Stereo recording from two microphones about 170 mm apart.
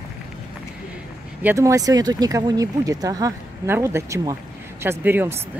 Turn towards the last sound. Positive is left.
turn(degrees=-15)  # may be behind; listen again after turning